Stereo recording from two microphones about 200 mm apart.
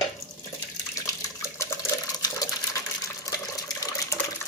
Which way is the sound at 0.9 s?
15° left (ahead or behind).